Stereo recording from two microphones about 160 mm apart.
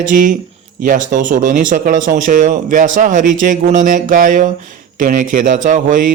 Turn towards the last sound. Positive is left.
turn(degrees=-55)  # may be behind; listen again after turning